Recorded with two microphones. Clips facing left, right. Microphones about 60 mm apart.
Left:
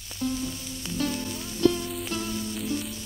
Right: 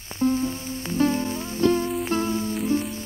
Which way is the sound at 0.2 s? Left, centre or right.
Right.